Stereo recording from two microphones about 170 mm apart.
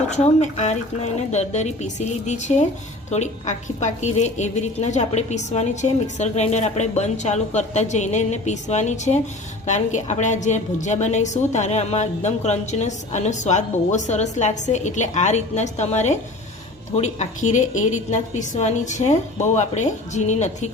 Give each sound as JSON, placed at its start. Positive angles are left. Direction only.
{"t": 0.1, "sound": "a woman's voice", "side_deg": 40}